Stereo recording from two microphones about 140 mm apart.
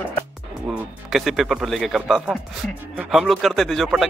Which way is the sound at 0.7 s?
Centre (ahead or behind).